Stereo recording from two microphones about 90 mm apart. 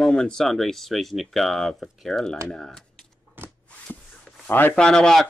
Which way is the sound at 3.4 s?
25° right (ahead or behind).